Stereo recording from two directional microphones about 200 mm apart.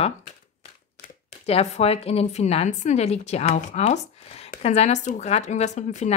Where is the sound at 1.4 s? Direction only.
30° left (ahead or behind).